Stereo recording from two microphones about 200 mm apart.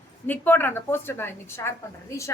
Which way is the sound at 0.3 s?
10° left (ahead or behind).